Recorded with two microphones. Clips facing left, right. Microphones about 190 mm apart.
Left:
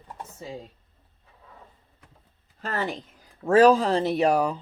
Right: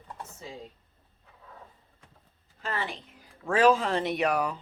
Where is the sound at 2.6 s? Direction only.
45° left (ahead or behind).